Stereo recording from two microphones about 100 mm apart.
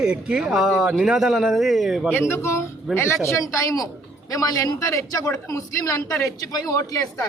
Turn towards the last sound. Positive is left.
turn(degrees=35)  # may be behind; listen again after turning